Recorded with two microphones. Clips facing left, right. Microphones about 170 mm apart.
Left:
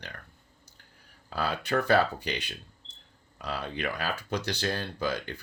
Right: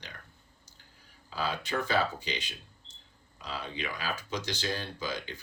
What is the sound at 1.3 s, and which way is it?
Speech, 60° left (ahead or behind).